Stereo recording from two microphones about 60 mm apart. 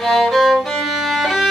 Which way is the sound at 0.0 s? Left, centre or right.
Centre.